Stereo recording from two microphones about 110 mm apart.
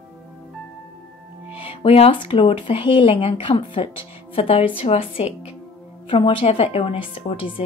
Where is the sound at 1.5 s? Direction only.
60° left (ahead or behind).